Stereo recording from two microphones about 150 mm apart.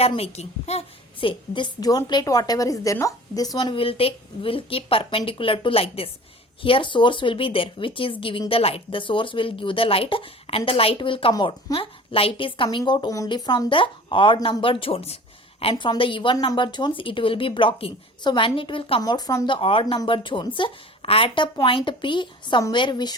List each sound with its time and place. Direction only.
0.0 s a woman's voice: 40° left (ahead or behind)
15.7 s a woman's voice: 30° left (ahead or behind)
19.5 s a woman's voice: 35° left (ahead or behind)